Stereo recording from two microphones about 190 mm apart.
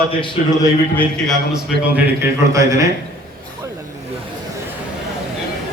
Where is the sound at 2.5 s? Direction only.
15° right (ahead or behind).